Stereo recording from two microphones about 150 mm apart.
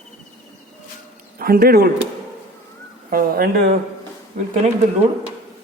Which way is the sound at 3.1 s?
80° right.